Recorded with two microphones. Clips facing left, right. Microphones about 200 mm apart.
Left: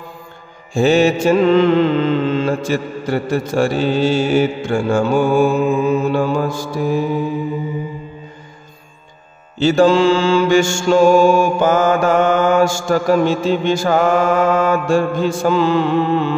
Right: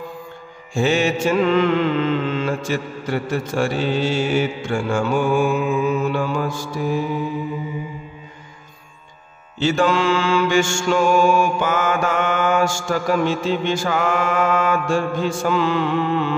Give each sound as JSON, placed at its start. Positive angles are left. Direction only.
{"t": 0.7, "sound": "mantra", "side_deg": 35}
{"t": 9.6, "sound": "mantra", "side_deg": 35}